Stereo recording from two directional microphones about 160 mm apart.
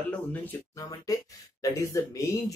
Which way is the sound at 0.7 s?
20° left (ahead or behind).